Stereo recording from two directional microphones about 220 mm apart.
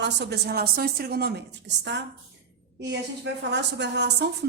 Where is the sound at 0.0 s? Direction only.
50° right (ahead or behind).